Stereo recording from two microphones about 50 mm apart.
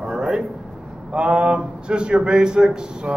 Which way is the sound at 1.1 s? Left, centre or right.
Right.